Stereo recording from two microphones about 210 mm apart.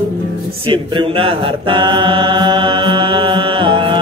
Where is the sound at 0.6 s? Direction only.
25° right (ahead or behind).